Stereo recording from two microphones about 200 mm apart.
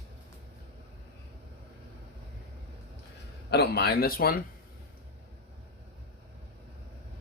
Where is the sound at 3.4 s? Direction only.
55° left (ahead or behind).